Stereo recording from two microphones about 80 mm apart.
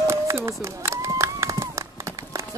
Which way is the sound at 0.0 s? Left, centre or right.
Right.